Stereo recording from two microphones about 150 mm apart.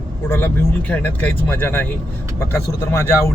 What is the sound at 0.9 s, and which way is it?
Speech, 10° left (ahead or behind).